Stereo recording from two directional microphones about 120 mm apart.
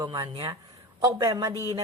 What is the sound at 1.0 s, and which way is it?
Speech, 30° right (ahead or behind).